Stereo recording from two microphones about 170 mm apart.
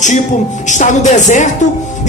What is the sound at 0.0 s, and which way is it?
Speech, 45° left (ahead or behind).